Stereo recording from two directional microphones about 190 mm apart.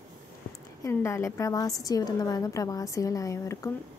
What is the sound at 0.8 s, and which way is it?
A woman's voice, 15° left (ahead or behind).